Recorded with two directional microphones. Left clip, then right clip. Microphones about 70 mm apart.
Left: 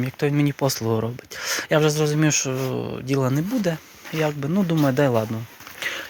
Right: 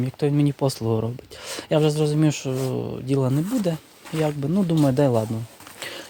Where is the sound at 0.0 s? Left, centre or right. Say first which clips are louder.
Even; right.